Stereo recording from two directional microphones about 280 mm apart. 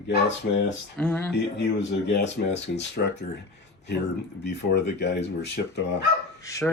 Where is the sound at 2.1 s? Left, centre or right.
Left.